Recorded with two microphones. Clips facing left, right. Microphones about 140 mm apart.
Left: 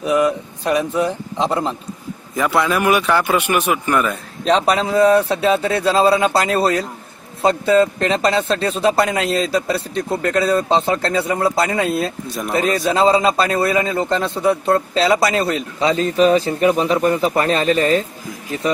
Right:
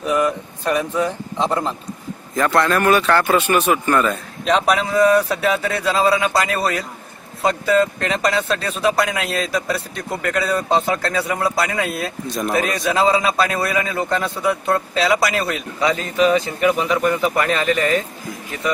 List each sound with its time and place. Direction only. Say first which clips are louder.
0.0 s a sound: left 2 dB; 10° left (ahead or behind)
2.3 s speech: even; 5° left (ahead or behind)
4.9 s a man's voice: left 2 dB; 30° left (ahead or behind)